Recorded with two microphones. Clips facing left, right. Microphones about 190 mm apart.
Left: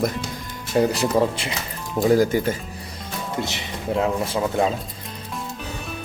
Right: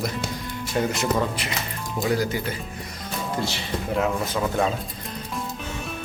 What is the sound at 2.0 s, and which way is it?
Speech, 45° left (ahead or behind).